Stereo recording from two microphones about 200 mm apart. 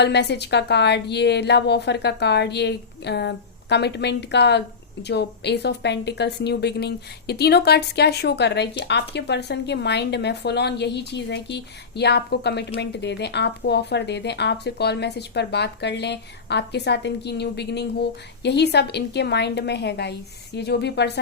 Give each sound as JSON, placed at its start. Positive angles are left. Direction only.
{"t": 0.0, "sound": "a woman's voice", "side_deg": 55}